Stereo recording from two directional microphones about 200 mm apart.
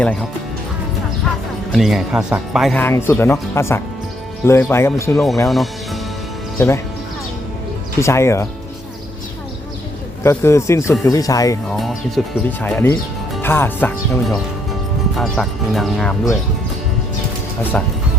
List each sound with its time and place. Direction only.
1.7 s speech: centre (ahead or behind)
2.8 s speech: 10° left (ahead or behind)
5.5 s speech: centre (ahead or behind)
6.6 s speech: 10° left (ahead or behind)
7.9 s speech: 15° left (ahead or behind)
10.2 s speech: 15° left (ahead or behind)
11.7 s speech: centre (ahead or behind)
17.6 s speech: 10° left (ahead or behind)